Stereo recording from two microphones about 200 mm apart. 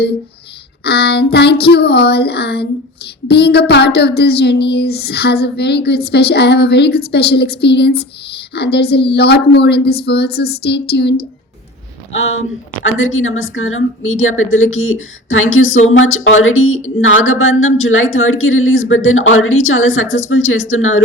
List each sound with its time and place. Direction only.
0.9 s a woman's voice: 55° left (ahead or behind)
12.4 s a woman's voice: 85° left